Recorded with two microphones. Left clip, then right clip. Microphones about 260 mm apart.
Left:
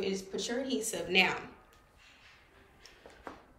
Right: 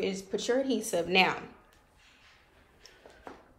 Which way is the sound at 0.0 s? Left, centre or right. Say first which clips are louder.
Right 3 dB; right.